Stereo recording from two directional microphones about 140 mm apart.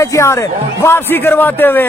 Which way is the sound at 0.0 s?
20° left (ahead or behind).